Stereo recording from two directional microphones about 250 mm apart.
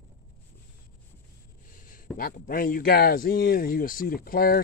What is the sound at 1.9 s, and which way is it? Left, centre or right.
Speech, left.